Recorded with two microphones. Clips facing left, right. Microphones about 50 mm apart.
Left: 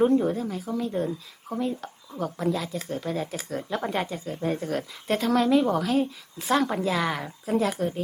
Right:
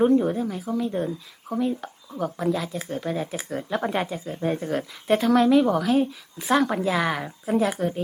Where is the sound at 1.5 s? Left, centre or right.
Centre.